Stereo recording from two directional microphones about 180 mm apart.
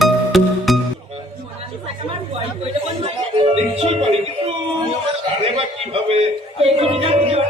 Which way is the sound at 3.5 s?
35° right (ahead or behind).